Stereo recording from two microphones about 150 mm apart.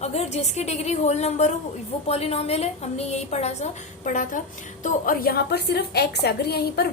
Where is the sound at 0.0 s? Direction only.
45° left (ahead or behind).